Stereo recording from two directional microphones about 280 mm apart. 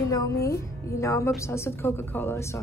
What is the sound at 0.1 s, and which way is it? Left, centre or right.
A woman's voice, centre.